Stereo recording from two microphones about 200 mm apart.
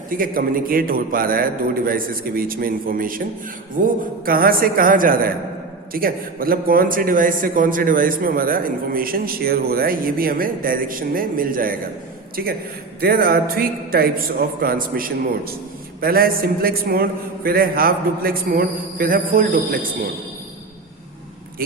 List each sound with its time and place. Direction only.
0.1 s a man's voice: 45° right (ahead or behind)